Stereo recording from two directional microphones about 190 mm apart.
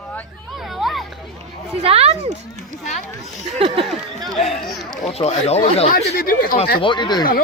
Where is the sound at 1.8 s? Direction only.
30° right (ahead or behind).